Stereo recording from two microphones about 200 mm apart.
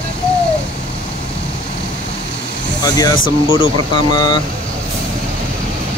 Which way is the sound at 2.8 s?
20° left (ahead or behind).